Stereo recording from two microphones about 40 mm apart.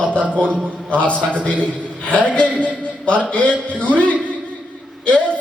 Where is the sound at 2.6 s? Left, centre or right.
Left.